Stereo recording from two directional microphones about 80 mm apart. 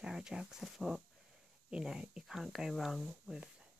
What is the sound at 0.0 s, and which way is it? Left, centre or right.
Speech, centre.